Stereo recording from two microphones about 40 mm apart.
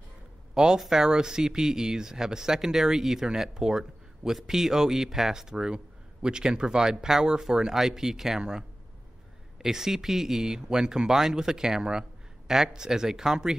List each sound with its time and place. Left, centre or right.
0.7 s speech: centre